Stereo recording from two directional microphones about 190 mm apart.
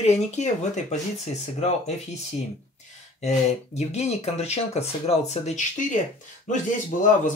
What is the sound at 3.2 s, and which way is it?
A man's voice, 35° left (ahead or behind).